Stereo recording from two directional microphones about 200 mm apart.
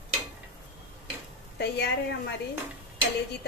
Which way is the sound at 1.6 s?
55° left (ahead or behind).